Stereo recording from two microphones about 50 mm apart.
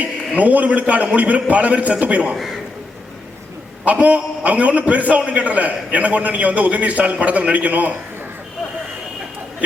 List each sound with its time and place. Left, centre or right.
0.3 s a man's voice: right
2.3 s a man's voice: centre
3.8 s a man's voice: right